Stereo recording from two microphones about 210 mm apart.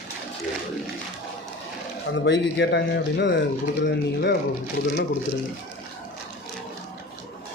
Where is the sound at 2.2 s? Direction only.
60° left (ahead or behind).